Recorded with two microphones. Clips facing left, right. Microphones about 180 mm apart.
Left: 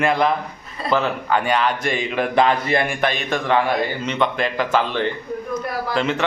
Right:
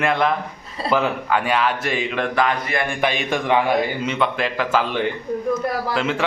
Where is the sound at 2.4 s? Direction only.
25° left (ahead or behind).